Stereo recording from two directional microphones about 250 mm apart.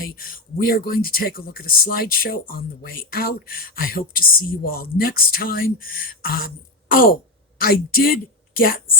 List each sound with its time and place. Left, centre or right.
0.0 s a woman's voice: left